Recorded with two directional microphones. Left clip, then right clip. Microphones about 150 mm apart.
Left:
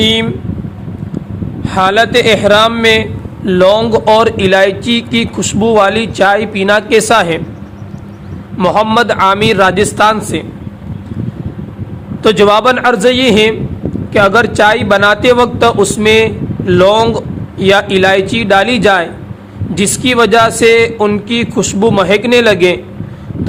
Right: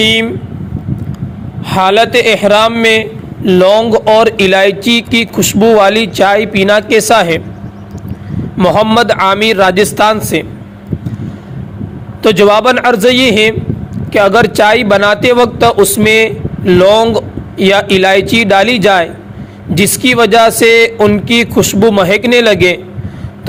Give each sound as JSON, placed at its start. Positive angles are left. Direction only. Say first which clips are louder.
{"t": 0.0, "sound": "a sound", "louder": "right 2 dB", "side_deg": -20}
{"t": 1.6, "sound": "a man's voice", "louder": "right 1 dB", "side_deg": -20}
{"t": 8.6, "sound": "a man's voice", "louder": "right 1 dB", "side_deg": -25}
{"t": 12.2, "sound": "a man's voice", "louder": "right 1 dB", "side_deg": -20}